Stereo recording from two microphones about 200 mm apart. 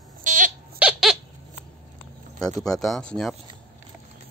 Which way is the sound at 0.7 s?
5° right (ahead or behind).